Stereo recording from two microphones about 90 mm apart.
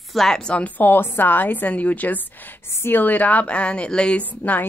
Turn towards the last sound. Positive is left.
turn(degrees=20)  # may be behind; listen again after turning